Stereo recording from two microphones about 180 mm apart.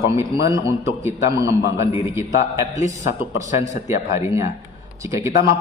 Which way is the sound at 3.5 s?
40° left (ahead or behind).